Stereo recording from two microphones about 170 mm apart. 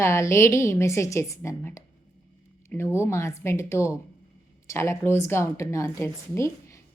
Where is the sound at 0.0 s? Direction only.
15° left (ahead or behind).